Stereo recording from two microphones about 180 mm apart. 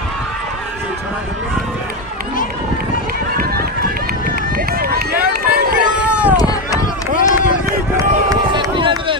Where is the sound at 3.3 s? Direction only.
55° right (ahead or behind).